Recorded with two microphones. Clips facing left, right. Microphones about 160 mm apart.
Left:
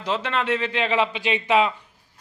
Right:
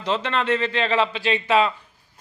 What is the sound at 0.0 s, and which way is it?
A man's voice, 10° left (ahead or behind).